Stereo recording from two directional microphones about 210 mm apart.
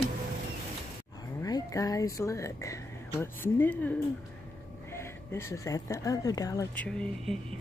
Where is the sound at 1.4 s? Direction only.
15° left (ahead or behind).